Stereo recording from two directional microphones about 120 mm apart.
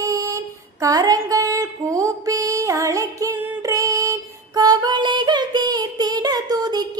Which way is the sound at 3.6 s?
25° right (ahead or behind).